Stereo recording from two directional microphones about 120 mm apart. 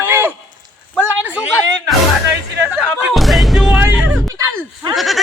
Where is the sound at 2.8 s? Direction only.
Centre (ahead or behind).